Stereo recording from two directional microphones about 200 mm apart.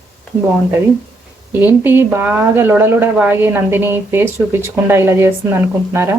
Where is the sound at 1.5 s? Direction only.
10° right (ahead or behind).